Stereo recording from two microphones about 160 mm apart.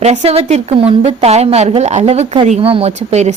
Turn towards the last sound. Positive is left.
turn(degrees=-45)  # may be behind; listen again after turning